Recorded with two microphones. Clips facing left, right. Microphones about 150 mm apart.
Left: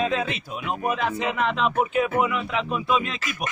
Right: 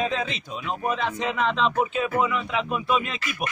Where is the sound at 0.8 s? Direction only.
5° left (ahead or behind).